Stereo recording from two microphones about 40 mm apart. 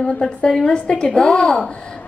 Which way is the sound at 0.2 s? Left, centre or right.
Centre.